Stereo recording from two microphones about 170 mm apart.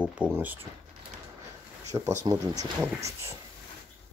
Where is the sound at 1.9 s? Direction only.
15° right (ahead or behind).